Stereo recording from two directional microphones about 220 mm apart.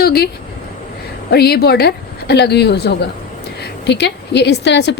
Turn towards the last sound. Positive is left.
turn(degrees=50)  # may be behind; listen again after turning